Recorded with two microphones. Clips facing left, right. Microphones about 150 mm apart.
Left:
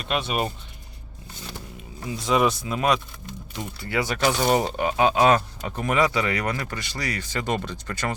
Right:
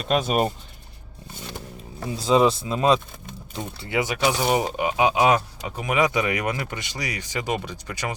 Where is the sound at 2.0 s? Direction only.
30° right (ahead or behind).